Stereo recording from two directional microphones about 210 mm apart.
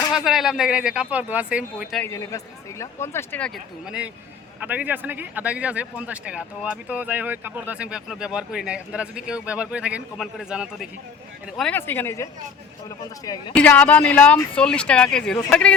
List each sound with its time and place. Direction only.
0.1 s speech: centre (ahead or behind)
2.0 s speech: 15° left (ahead or behind)
13.5 s speech: 5° left (ahead or behind)